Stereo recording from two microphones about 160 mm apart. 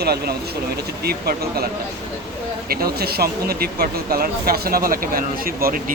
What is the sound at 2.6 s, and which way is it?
Speech, 70° right (ahead or behind).